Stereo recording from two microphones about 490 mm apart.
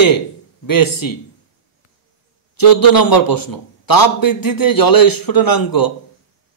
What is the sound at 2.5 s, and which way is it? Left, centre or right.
A man's voice, left.